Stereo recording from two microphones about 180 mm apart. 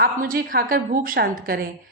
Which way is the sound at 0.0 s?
50° right (ahead or behind).